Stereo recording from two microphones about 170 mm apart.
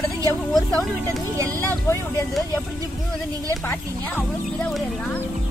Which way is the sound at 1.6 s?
15° left (ahead or behind).